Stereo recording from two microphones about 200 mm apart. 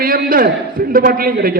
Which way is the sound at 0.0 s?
45° right (ahead or behind).